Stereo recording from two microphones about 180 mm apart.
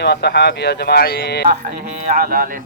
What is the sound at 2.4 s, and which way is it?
Speech, 50° right (ahead or behind).